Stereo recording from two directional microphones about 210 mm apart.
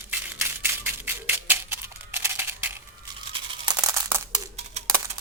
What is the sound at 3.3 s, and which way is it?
Crumpling, 20° right (ahead or behind).